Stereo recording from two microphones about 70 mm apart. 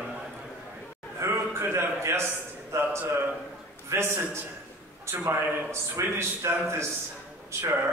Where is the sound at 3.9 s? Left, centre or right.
Right.